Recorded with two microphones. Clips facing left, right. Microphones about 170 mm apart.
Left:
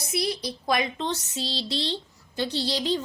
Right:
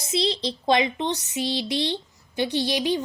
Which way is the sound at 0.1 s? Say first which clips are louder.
Right 4 dB; 25° right (ahead or behind).